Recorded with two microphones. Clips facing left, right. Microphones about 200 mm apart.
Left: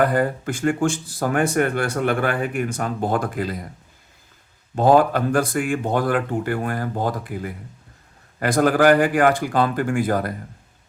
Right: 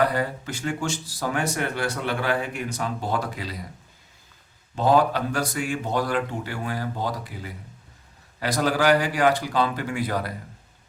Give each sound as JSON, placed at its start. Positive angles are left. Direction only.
{"t": 0.0, "sound": "speech", "side_deg": 50}
{"t": 4.7, "sound": "speech", "side_deg": 50}